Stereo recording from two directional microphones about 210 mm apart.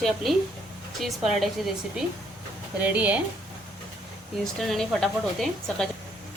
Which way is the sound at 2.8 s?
5° right (ahead or behind).